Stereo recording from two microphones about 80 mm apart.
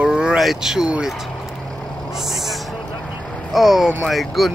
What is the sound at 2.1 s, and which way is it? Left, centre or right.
Vehicle, centre.